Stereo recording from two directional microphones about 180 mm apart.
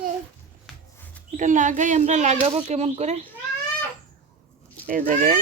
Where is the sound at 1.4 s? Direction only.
45° right (ahead or behind).